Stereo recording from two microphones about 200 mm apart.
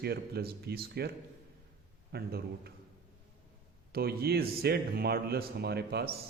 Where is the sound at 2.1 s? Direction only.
50° right (ahead or behind).